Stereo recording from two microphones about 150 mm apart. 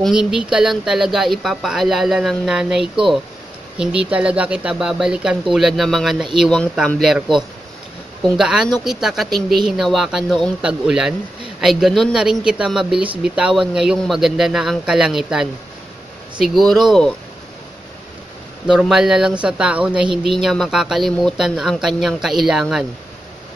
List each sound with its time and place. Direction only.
0.0 s speech: 5° right (ahead or behind)
18.7 s speech: 5° right (ahead or behind)